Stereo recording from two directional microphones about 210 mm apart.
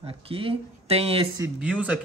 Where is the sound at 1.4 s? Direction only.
5° right (ahead or behind).